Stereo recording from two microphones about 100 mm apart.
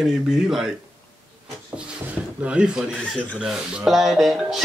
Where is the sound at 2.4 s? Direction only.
10° right (ahead or behind).